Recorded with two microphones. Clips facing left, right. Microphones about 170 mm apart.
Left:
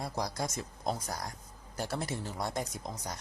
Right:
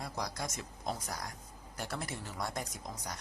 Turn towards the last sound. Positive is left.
turn(degrees=25)  # may be behind; listen again after turning